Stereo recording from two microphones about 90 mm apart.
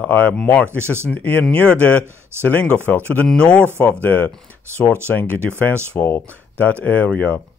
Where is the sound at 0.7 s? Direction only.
30° right (ahead or behind).